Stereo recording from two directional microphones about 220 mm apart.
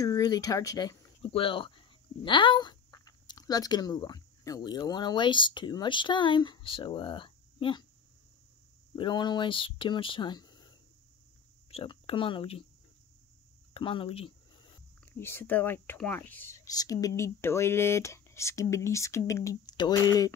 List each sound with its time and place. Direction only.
0.0 s speech: 15° left (ahead or behind)
8.9 s speech: 20° left (ahead or behind)
11.7 s speech: 25° left (ahead or behind)
13.7 s speech: 25° left (ahead or behind)
15.0 s speech: 10° left (ahead or behind)